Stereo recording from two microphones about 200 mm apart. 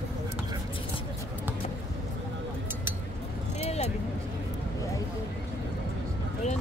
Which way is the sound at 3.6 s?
30° left (ahead or behind).